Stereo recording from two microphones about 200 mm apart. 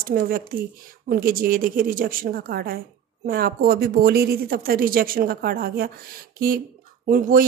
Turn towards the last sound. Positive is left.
turn(degrees=-45)  # may be behind; listen again after turning